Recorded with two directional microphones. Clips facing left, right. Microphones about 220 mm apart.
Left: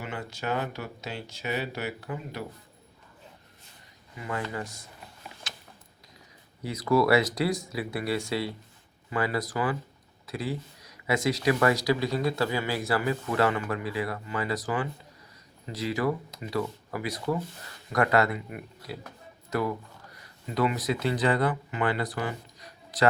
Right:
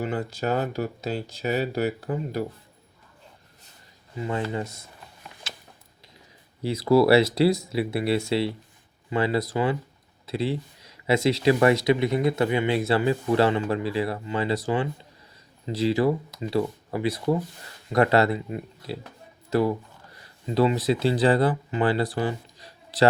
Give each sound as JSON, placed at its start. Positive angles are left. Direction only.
{"t": 0.0, "sound": "speech", "side_deg": -35}
{"t": 4.1, "sound": "speech", "side_deg": -25}
{"t": 6.6, "sound": "speech", "side_deg": -25}